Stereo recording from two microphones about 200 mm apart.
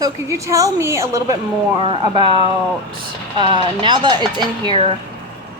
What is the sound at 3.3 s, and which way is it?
A woman's voice, 25° right (ahead or behind).